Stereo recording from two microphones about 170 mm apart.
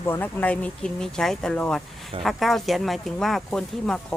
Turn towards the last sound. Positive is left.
turn(degrees=0)  # may be behind; listen again after turning